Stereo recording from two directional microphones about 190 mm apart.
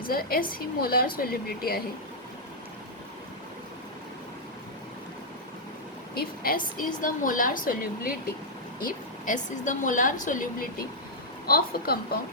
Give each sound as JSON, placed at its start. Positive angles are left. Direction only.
{"t": 0.1, "sound": "a woman's voice", "side_deg": 50}
{"t": 6.1, "sound": "a woman's voice", "side_deg": 50}